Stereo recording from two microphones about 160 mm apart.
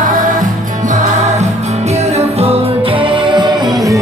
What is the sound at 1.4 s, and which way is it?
Music, 45° right (ahead or behind).